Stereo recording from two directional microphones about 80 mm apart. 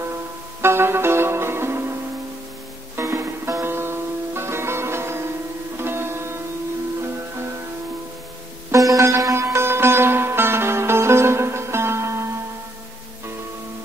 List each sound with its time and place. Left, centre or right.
0.6 s music: right
3.0 s music: right
8.7 s sitar: right